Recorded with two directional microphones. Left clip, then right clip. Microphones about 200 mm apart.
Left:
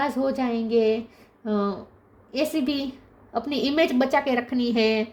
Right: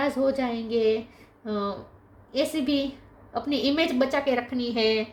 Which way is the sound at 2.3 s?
40° left (ahead or behind).